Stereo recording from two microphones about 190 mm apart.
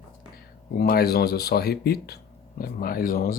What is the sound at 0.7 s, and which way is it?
Speech, 55° left (ahead or behind).